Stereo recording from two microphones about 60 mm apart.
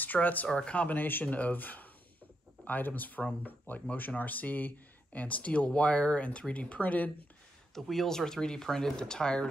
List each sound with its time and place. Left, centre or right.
0.0 s speech: left
7.7 s speech: centre